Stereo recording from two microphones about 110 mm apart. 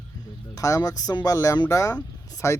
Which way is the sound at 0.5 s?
30° left (ahead or behind).